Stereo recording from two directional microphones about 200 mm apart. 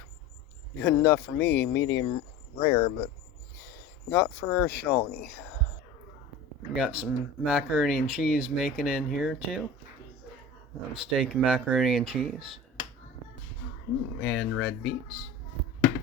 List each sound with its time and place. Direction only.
0.8 s speech: 10° left (ahead or behind); by 3.1 s 30° left (ahead or behind)
4.1 s speech: 15° left (ahead or behind)
6.7 s speech: 5° right (ahead or behind)
11.0 s speech: 5° right (ahead or behind)
14.2 s speech: centre (ahead or behind)